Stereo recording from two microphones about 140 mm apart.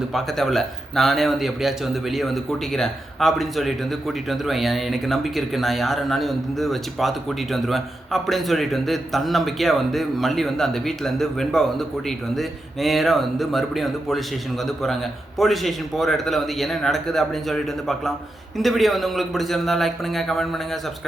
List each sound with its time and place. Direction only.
0.1 s a man's voice: centre (ahead or behind)